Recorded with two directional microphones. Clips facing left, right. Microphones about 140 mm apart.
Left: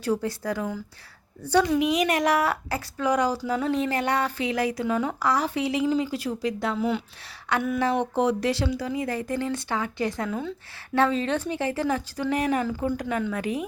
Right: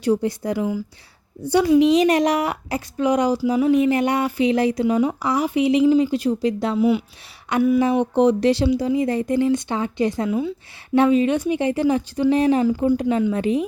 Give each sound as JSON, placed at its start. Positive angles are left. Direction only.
{"t": 0.0, "sound": "speech", "side_deg": -20}
{"t": 1.8, "sound": "speech", "side_deg": -30}
{"t": 6.7, "sound": "speech", "side_deg": -10}